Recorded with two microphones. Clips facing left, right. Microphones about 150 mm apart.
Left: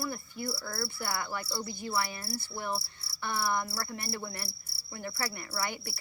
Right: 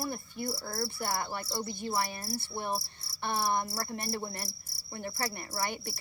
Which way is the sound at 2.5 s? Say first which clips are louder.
Right 1 dB; 25° right (ahead or behind).